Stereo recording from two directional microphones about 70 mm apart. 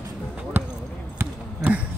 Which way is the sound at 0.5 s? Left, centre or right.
Right.